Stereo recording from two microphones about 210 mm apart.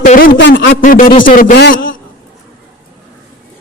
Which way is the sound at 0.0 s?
40° left (ahead or behind).